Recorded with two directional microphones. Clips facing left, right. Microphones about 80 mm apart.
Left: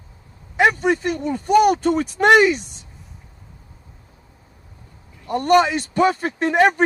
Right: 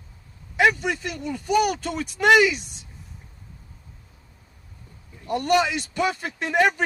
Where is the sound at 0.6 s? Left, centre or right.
Left.